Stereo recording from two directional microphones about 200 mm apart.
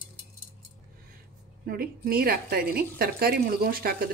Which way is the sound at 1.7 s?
50° right (ahead or behind).